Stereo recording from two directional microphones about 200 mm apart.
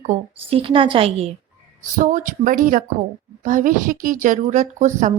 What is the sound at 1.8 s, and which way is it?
A woman's voice, 40° right (ahead or behind).